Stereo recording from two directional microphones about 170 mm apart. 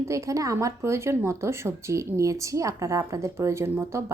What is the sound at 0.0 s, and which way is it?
Speech, 15° right (ahead or behind).